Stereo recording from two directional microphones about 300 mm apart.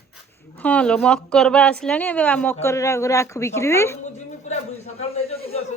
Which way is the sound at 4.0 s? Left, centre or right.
Left.